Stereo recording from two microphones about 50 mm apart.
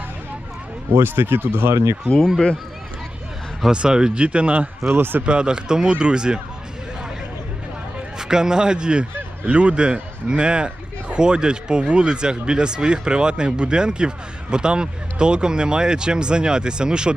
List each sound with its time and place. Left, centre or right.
0.9 s speech: right
1.7 s speech: right
3.7 s speech: centre
4.2 s a man's voice: right
4.9 s speech: right
5.2 s speech: centre
8.2 s a man's voice: centre